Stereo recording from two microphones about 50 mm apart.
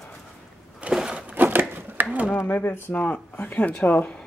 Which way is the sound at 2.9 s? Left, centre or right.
Left.